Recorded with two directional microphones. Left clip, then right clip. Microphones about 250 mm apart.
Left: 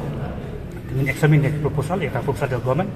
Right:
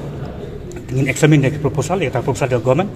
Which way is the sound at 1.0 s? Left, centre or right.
Right.